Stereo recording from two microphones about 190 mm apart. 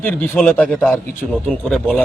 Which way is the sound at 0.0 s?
5° left (ahead or behind).